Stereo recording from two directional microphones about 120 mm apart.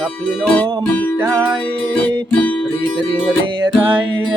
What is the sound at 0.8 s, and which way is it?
Music, 15° left (ahead or behind).